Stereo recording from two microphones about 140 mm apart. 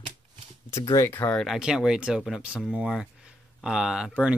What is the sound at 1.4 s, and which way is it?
Speech, centre (ahead or behind).